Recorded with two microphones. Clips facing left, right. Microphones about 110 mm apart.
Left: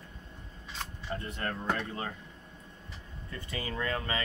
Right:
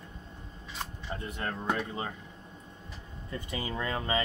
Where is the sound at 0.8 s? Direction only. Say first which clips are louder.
Even; 15° right (ahead or behind).